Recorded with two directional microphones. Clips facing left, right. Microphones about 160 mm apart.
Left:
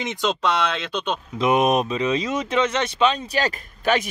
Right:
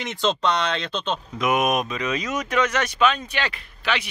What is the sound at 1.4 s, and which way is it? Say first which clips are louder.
Speech: left 3 dB; 30° left (ahead or behind).